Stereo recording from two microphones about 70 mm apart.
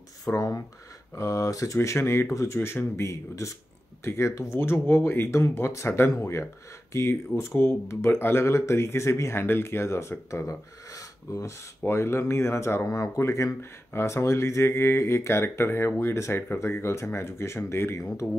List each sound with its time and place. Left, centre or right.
0.2 s speech: left
11.8 s speech: left